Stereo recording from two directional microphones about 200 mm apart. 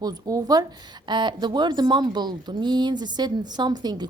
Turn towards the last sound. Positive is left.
turn(degrees=-20)  # may be behind; listen again after turning